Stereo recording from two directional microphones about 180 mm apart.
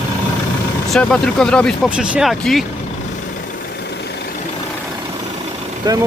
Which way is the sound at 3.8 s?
65° left (ahead or behind).